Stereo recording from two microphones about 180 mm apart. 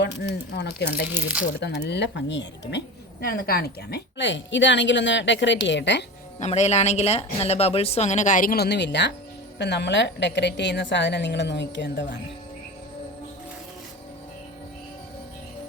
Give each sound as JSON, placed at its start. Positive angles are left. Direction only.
{"t": 0.0, "sound": "a woman's voice", "side_deg": 70}
{"t": 1.0, "sound": "speech", "side_deg": -10}
{"t": 1.9, "sound": "a woman's voice", "side_deg": 75}
{"t": 3.2, "sound": "a woman's voice", "side_deg": 55}
{"t": 6.4, "sound": "a woman's voice", "side_deg": 40}